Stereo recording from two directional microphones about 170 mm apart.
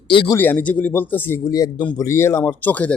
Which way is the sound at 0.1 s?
30° left (ahead or behind).